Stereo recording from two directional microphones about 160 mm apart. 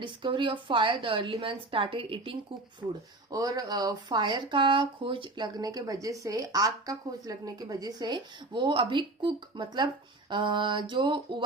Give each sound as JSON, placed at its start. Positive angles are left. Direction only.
{"t": 0.0, "sound": "a woman's voice", "side_deg": -30}
{"t": 2.8, "sound": "speech", "side_deg": -15}